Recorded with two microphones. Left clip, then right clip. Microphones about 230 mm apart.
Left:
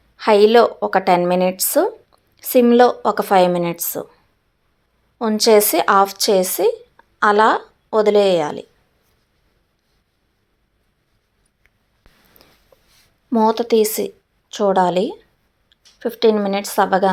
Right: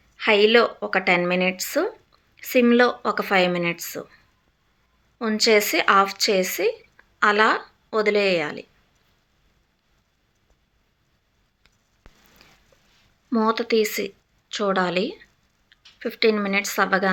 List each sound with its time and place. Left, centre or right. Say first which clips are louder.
0.2 s a woman's voice: left 5 dB; centre
5.2 s a woman's voice: left 5 dB; centre
12.0 s a sound: even; centre
13.3 s a woman's voice: left 6 dB; centre